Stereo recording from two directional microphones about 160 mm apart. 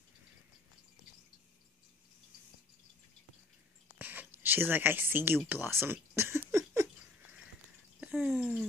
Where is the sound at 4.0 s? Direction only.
10° right (ahead or behind).